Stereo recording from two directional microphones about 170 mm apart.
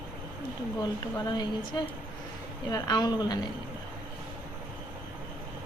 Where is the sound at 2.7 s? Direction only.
25° left (ahead or behind).